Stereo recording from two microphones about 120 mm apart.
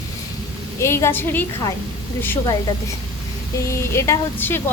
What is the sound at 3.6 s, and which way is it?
Speech, 25° left (ahead or behind).